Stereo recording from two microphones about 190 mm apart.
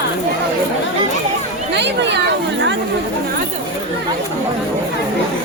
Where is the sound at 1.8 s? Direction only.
65° right (ahead or behind).